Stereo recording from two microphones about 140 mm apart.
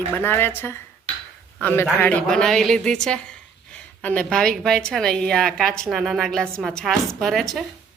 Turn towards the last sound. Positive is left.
turn(degrees=0)  # may be behind; listen again after turning